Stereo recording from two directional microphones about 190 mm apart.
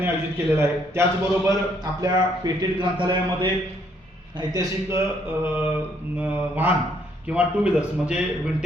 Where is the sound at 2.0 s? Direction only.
20° right (ahead or behind).